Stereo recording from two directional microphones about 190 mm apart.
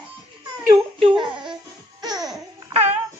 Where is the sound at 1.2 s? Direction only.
25° right (ahead or behind).